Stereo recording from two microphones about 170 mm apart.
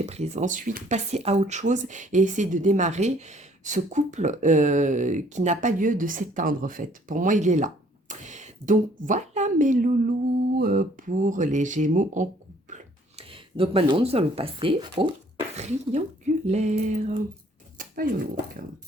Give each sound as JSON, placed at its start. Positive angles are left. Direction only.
{"t": 0.0, "sound": "speech", "side_deg": -40}
{"t": 12.7, "sound": "speech", "side_deg": -35}
{"t": 17.7, "sound": "dog", "side_deg": -55}